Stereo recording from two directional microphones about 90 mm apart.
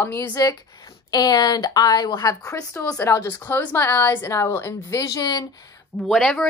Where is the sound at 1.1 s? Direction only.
45° left (ahead or behind).